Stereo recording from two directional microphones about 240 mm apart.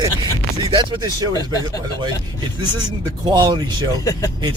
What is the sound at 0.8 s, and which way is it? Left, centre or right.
Speech, centre.